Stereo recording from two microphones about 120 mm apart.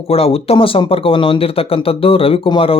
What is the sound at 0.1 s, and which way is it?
Speech, 55° left (ahead or behind).